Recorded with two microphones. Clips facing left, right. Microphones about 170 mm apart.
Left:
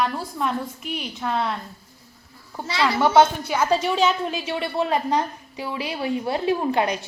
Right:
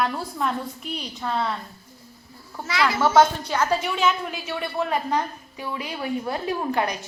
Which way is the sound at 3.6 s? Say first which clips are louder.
Left 4 dB; 30° left (ahead or behind).